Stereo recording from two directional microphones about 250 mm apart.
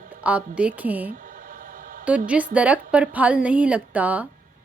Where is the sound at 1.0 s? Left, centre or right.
Right.